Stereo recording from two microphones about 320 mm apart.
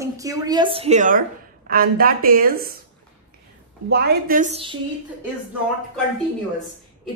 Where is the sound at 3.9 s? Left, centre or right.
Right.